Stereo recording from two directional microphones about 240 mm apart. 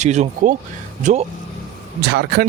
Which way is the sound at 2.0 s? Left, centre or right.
Right.